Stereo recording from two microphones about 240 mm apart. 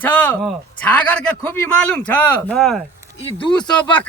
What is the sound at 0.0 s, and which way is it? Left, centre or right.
A man's voice, centre.